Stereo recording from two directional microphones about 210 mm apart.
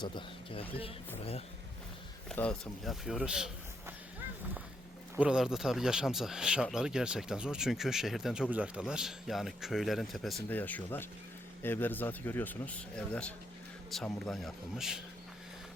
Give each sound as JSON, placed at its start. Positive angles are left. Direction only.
{"t": 0.0, "sound": "speech", "side_deg": 25}
{"t": 2.3, "sound": "speech", "side_deg": 5}
{"t": 5.1, "sound": "speech", "side_deg": -5}